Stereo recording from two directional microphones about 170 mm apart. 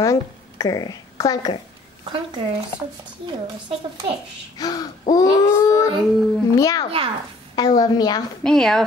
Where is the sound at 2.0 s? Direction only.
25° right (ahead or behind).